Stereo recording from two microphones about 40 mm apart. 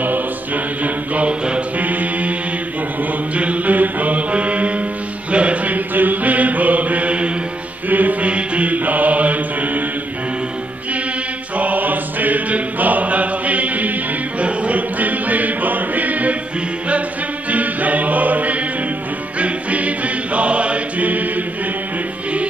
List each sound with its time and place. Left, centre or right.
0.8 s mantra: right
3.3 s mantra: right
5.3 s music: right
5.9 s mantra: right
7.9 s music: right
11.5 s mantra: right
14.4 s music: right
17.5 s music: right
20.3 s chant: right